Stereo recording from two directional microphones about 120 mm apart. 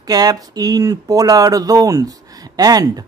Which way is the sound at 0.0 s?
35° right (ahead or behind).